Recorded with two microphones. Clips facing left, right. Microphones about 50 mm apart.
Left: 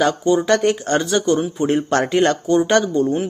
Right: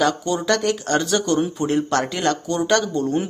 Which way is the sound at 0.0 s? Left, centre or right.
Left.